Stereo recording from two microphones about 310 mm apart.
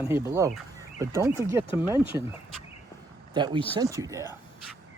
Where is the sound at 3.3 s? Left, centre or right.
Centre.